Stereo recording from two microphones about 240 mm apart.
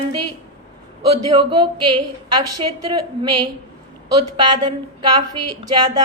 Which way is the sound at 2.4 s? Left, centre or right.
Right.